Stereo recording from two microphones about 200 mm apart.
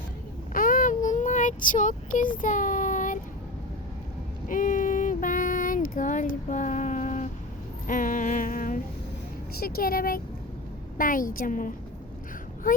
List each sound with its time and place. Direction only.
0.5 s child singing: 40° left (ahead or behind)
4.4 s a sound: 40° left (ahead or behind)
9.6 s a woman's voice: 50° left (ahead or behind)